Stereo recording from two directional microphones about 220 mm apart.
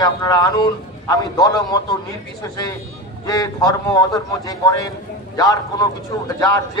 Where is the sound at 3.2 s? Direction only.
15° left (ahead or behind).